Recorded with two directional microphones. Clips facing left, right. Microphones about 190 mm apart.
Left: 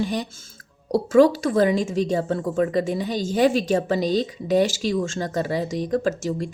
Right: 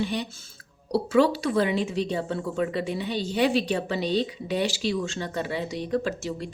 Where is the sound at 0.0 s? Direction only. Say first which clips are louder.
Left 3 dB; 45° left (ahead or behind).